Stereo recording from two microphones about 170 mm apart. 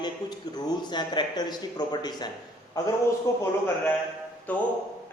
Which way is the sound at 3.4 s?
15° left (ahead or behind).